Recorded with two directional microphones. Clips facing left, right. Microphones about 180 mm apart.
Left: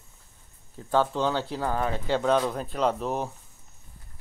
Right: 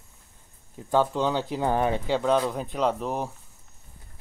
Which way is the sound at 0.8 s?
10° right (ahead or behind).